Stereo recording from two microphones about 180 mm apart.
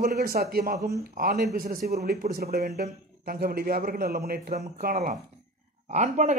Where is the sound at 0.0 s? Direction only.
55° right (ahead or behind).